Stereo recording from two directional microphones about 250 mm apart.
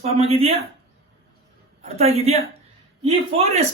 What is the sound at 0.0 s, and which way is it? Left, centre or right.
Speech, right.